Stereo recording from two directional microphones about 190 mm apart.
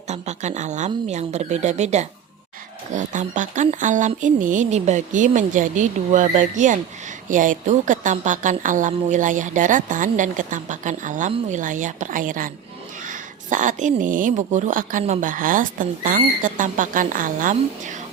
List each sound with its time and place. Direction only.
0.1 s speech: 35° right (ahead or behind)